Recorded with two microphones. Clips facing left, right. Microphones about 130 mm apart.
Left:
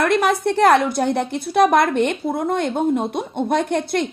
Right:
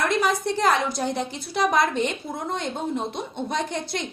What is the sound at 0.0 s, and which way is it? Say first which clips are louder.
A woman's voice: left 5 dB; 60° left (ahead or behind).